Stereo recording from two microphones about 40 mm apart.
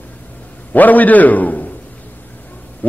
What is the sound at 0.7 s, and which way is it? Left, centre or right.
Speech, left.